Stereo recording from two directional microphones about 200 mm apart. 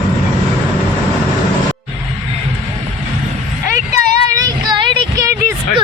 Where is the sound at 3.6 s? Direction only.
40° left (ahead or behind).